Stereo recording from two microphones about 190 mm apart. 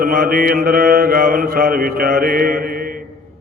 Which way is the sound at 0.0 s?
50° right (ahead or behind).